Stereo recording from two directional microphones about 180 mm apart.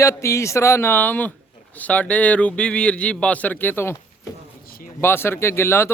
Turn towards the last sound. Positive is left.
turn(degrees=15)  # may be behind; listen again after turning